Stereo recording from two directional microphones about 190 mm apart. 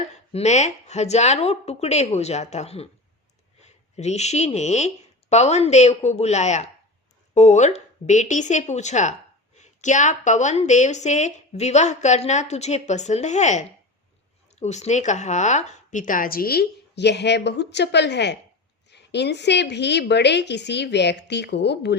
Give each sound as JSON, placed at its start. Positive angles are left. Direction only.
{"t": 0.3, "sound": "a woman's voice", "side_deg": 35}